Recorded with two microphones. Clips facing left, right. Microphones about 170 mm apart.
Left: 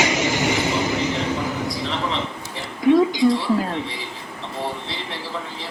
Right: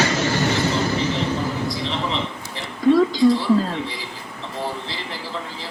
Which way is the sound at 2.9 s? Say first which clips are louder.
Even; 15° left (ahead or behind).